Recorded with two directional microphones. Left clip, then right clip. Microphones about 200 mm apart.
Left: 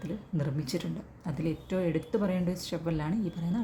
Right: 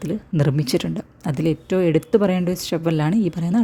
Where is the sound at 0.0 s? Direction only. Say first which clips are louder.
Right 13 dB; 45° right (ahead or behind).